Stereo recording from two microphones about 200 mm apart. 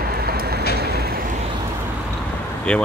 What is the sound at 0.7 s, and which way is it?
Vehicle, 55° right (ahead or behind).